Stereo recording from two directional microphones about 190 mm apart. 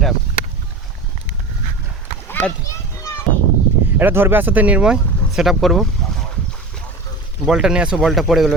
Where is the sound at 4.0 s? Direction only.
10° right (ahead or behind).